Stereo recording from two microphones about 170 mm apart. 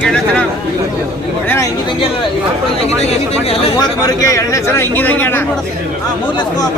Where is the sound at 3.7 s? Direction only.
20° left (ahead or behind).